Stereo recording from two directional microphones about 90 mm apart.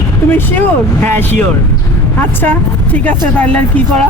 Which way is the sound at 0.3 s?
20° left (ahead or behind).